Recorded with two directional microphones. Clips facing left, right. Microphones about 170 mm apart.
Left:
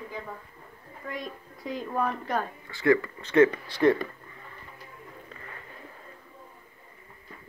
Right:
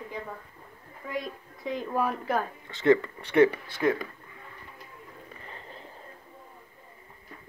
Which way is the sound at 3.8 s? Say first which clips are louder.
Left 4 dB; centre (ahead or behind).